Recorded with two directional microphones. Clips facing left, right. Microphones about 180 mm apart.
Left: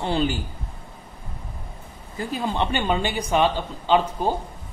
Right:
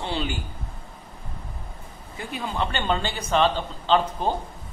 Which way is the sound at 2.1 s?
35° left (ahead or behind).